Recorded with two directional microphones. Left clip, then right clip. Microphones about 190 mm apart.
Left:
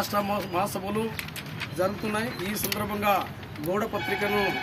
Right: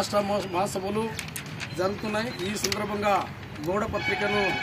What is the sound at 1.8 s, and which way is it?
Speech, 10° left (ahead or behind).